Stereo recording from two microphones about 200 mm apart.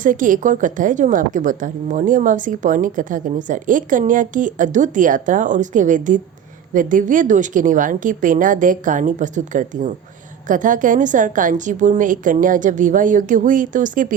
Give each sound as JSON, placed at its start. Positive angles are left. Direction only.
{"t": 0.0, "sound": "a woman's voice", "side_deg": -40}